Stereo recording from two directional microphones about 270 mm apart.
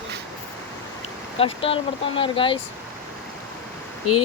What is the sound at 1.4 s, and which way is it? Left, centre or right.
Speech, left.